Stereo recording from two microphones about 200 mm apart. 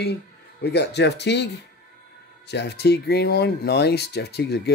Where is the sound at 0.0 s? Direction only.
55° left (ahead or behind).